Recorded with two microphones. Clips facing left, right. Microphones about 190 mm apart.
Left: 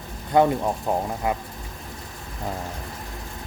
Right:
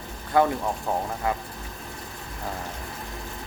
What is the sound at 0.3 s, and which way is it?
Speech, 20° left (ahead or behind).